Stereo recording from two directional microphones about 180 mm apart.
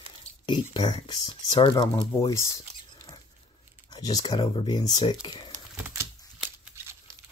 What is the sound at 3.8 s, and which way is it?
Speech, 20° left (ahead or behind).